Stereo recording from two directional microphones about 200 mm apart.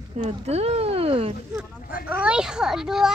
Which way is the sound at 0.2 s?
30° right (ahead or behind).